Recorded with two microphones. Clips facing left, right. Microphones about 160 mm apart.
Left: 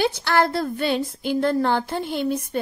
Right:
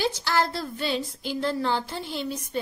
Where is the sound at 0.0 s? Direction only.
60° left (ahead or behind).